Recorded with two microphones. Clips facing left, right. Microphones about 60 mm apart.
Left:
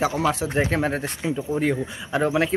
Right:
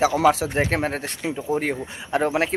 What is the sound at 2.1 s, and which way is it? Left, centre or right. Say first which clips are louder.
Speech: even; right.